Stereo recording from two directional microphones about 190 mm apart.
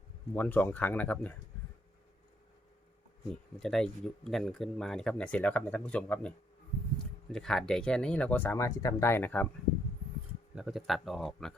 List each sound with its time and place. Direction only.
0.3 s speech: 10° left (ahead or behind)
3.6 s speech: centre (ahead or behind)
10.5 s speech: centre (ahead or behind)